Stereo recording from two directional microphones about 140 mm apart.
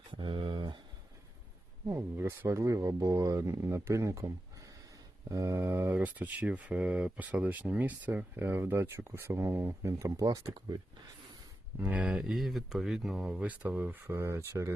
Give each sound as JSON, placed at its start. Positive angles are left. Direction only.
{"t": 0.1, "sound": "a sound", "side_deg": -35}
{"t": 1.9, "sound": "speech", "side_deg": -15}
{"t": 11.8, "sound": "speech", "side_deg": -10}